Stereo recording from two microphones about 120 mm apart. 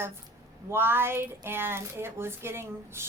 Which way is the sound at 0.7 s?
20° right (ahead or behind).